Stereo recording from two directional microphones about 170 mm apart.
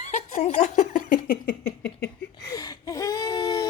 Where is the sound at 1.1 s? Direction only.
55° left (ahead or behind).